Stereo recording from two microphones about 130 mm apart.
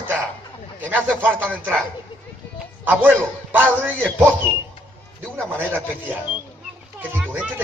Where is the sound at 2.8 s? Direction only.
15° right (ahead or behind).